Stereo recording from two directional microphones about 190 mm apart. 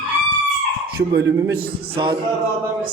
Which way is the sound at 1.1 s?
60° right (ahead or behind).